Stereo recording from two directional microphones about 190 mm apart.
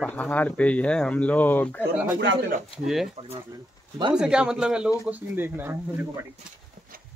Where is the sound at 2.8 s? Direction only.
Centre (ahead or behind).